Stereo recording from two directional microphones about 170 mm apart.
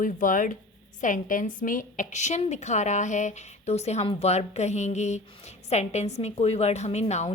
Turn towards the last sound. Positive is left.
turn(degrees=40)  # may be behind; listen again after turning